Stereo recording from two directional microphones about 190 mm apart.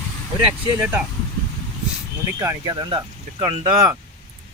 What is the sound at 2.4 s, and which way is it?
Speech, 15° right (ahead or behind).